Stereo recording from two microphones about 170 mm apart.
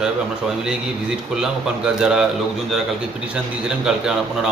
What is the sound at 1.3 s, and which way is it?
A man's voice, 5° right (ahead or behind).